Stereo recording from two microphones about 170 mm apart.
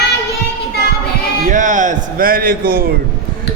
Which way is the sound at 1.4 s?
50° right (ahead or behind).